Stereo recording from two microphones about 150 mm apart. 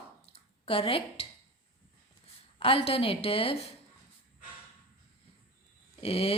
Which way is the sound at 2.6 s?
40° left (ahead or behind).